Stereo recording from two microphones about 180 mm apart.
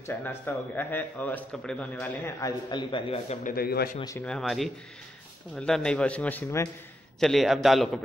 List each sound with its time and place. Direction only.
0.0 s a man's voice: 10° left (ahead or behind)
2.0 s a man's voice: 15° left (ahead or behind)
3.4 s a man's voice: 60° left (ahead or behind)
4.2 s a man's voice: 5° left (ahead or behind)
7.2 s a man's voice: centre (ahead or behind)